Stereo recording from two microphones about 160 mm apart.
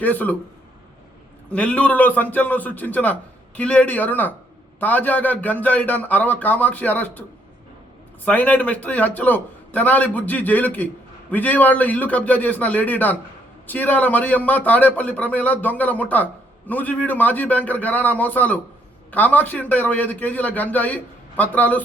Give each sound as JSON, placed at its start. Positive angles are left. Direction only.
{"t": 0.0, "sound": "speech", "side_deg": 10}
{"t": 1.5, "sound": "speech", "side_deg": 10}